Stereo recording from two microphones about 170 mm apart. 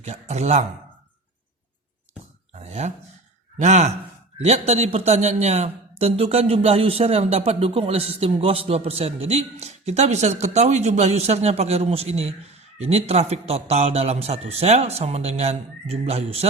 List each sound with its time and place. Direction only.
0.0 s a man's voice: 40° right (ahead or behind)
2.6 s a sound: 40° right (ahead or behind)
3.6 s a man's voice: 45° right (ahead or behind)